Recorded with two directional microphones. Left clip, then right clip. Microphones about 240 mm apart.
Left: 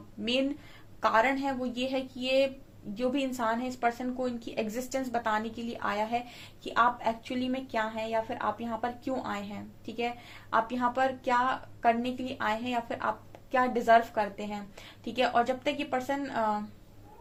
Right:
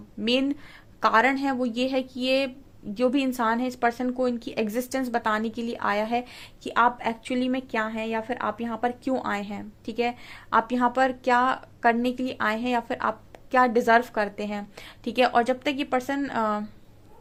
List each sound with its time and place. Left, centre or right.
1.0 s speech: right